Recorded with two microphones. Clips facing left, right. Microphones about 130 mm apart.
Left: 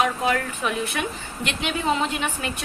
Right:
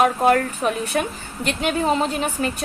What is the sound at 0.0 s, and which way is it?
A woman's voice, 50° right (ahead or behind).